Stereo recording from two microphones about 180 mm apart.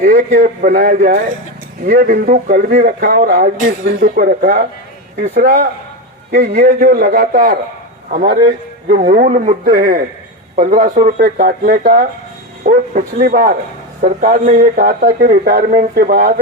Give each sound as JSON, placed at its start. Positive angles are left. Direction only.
{"t": 0.0, "sound": "speech", "side_deg": -55}